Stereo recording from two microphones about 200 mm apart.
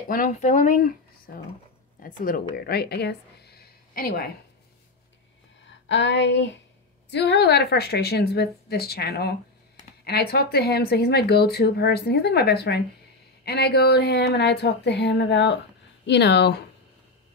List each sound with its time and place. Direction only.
0.1 s speech: 40° left (ahead or behind)
5.7 s a sound: 65° left (ahead or behind)
7.1 s speech: 60° left (ahead or behind)